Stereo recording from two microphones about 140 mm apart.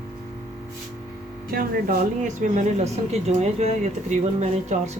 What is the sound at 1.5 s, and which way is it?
A woman's voice, 90° right.